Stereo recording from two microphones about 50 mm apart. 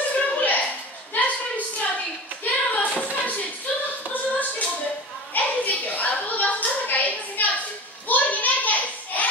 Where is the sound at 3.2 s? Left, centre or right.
Left.